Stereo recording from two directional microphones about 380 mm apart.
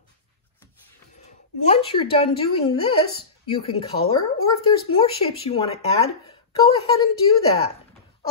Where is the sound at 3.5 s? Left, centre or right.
Centre.